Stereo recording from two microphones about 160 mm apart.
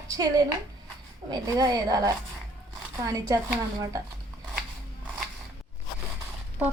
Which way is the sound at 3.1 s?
20° right (ahead or behind).